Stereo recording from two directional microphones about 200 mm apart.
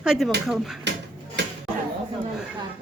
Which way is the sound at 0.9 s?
60° right (ahead or behind).